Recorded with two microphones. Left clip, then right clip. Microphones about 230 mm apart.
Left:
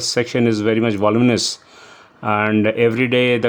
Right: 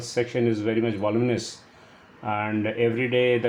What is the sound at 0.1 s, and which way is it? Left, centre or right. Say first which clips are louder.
Speech: left 5 dB; left.